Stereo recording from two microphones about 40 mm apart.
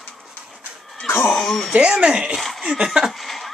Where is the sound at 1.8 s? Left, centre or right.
Right.